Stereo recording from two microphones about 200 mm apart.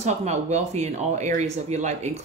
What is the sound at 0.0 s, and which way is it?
Speech, 35° right (ahead or behind).